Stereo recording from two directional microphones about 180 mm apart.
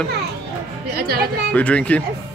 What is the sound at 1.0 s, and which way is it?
Speech, 60° right (ahead or behind).